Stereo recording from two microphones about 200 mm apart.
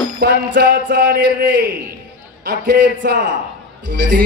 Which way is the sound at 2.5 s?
50° right (ahead or behind).